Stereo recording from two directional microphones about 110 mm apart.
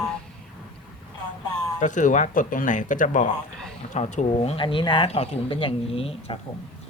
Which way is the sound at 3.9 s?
90° left.